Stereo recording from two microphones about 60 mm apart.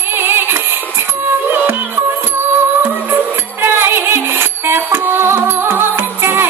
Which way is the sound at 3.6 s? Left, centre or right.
Right.